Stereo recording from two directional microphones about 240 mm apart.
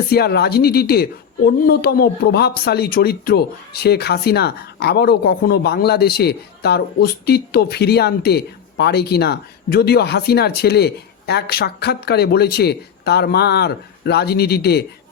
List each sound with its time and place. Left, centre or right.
0.1 s speech: left